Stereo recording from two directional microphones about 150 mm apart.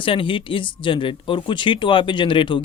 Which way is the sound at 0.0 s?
35° left (ahead or behind).